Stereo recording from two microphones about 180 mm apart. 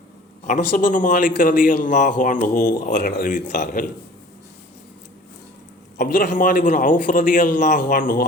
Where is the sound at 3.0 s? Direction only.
70° left (ahead or behind).